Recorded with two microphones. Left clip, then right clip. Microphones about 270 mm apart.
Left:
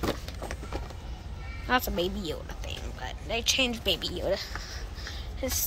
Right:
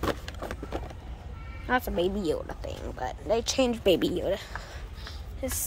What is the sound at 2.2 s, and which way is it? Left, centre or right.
A woman's voice, centre.